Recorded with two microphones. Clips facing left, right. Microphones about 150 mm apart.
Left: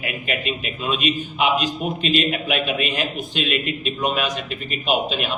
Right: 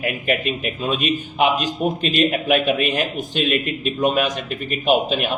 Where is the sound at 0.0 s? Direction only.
45° right (ahead or behind).